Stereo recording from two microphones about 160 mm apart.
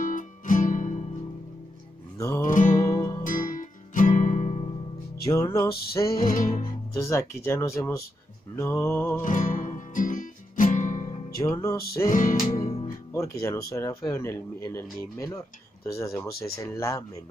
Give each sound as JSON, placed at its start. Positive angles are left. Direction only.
{"t": 0.0, "sound": "music", "side_deg": 55}
{"t": 2.1, "sound": "music", "side_deg": 20}
{"t": 2.4, "sound": "music", "side_deg": 55}
{"t": 5.3, "sound": "music", "side_deg": 20}
{"t": 5.7, "sound": "music", "side_deg": 75}
{"t": 6.1, "sound": "music", "side_deg": 55}
{"t": 7.0, "sound": "speech", "side_deg": 15}
{"t": 9.2, "sound": "music", "side_deg": 55}
{"t": 11.2, "sound": "music", "side_deg": 20}
{"t": 12.1, "sound": "music", "side_deg": 55}
{"t": 13.1, "sound": "speech", "side_deg": 15}